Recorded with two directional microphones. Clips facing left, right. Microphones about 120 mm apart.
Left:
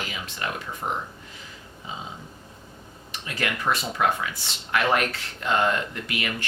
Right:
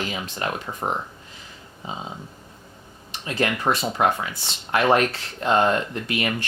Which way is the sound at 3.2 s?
30° right (ahead or behind).